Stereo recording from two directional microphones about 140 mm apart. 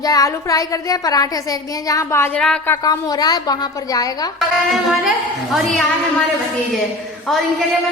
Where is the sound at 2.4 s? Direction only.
5° left (ahead or behind).